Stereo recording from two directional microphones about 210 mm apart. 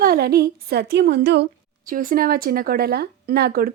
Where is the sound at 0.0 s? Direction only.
45° right (ahead or behind).